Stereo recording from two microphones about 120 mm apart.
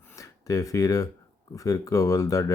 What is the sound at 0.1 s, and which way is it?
Speech, 30° left (ahead or behind).